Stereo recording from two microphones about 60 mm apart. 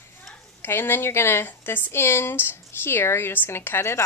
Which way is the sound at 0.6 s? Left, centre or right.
Left.